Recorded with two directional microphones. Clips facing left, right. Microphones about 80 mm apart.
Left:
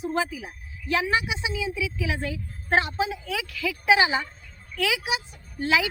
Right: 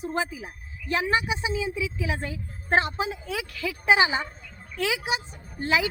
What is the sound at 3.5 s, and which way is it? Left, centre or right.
Speech, right.